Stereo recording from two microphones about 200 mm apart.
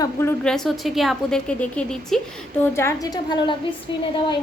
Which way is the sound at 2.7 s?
15° left (ahead or behind).